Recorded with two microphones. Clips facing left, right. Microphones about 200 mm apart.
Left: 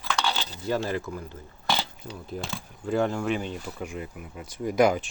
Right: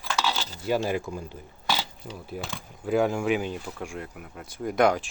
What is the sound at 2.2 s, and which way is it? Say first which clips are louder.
Speech: left 2 dB; 5° right (ahead or behind).